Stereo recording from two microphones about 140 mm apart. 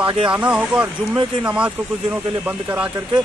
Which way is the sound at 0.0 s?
35° right (ahead or behind).